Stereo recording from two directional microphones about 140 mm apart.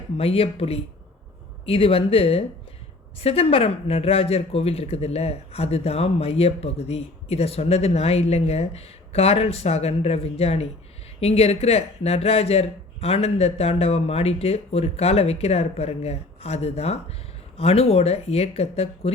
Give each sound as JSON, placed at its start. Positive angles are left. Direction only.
{"t": 0.2, "sound": "speech", "side_deg": 45}